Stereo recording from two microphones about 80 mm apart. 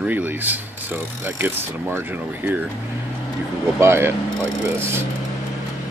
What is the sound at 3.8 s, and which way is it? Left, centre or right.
Speech, right.